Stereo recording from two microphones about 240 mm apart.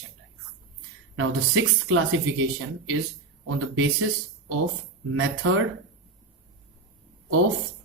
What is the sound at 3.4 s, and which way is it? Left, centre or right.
Speech, right.